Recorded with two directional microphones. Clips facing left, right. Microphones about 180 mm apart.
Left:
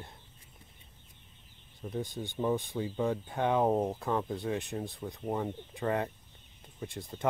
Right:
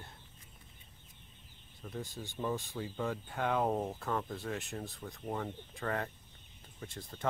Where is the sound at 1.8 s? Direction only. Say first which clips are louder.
Left 6 dB; 20° left (ahead or behind).